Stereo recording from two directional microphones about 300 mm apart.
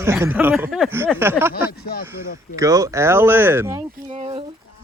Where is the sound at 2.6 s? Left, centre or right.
Centre.